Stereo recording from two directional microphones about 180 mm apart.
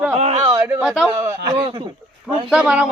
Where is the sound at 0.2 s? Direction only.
35° right (ahead or behind).